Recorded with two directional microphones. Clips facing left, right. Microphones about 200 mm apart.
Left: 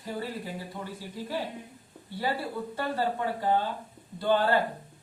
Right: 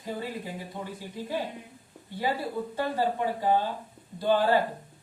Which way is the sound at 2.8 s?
15° right (ahead or behind).